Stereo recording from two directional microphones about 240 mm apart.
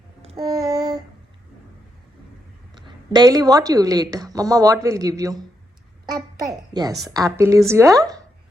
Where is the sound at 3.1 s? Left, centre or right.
Centre.